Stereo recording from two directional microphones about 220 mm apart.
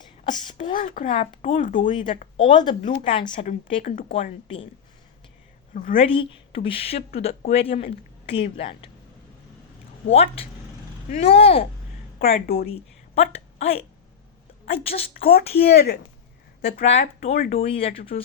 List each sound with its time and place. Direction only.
0.4 s speech: 25° left (ahead or behind)
0.7 s a woman's voice: 35° left (ahead or behind)
2.4 s speech: 20° left (ahead or behind)
5.7 s a woman's voice: 35° left (ahead or behind)
6.0 s speech: 25° left (ahead or behind)
10.1 s speech: 30° left (ahead or behind)
12.2 s a woman's voice: 40° left (ahead or behind)
12.7 s a woman's voice: 25° left (ahead or behind)
15.5 s a woman's voice: 45° left (ahead or behind)
16.8 s speech: 30° left (ahead or behind)